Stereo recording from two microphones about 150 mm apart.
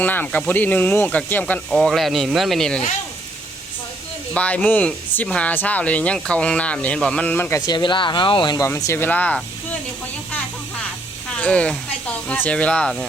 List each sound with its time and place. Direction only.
0.0 s speech: 10° left (ahead or behind)
4.4 s speech: 10° left (ahead or behind)
7.7 s speech: 30° left (ahead or behind); by 9.4 s 10° left (ahead or behind)
11.3 s speech: 10° left (ahead or behind)